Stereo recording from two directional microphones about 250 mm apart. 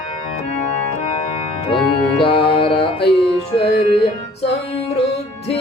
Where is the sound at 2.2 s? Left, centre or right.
Left.